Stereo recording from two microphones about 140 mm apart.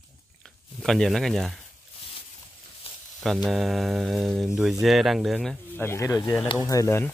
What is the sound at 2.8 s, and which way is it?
Sizzle, 45° left (ahead or behind).